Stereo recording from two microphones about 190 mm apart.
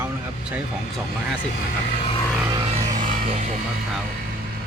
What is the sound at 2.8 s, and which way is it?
Music, 40° right (ahead or behind).